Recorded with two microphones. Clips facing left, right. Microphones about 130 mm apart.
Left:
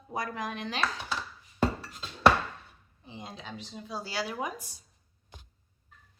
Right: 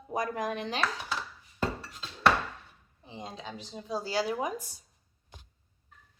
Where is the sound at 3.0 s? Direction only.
35° right (ahead or behind).